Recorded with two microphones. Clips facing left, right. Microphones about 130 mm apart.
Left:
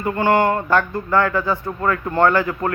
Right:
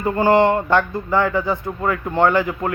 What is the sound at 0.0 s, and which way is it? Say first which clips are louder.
A man's voice: right 2 dB; 30° right (ahead or behind).